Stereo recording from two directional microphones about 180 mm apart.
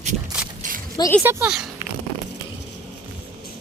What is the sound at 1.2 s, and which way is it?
Speech, 5° right (ahead or behind).